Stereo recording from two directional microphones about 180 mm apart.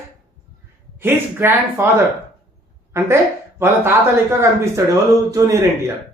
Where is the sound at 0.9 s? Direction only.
10° right (ahead or behind).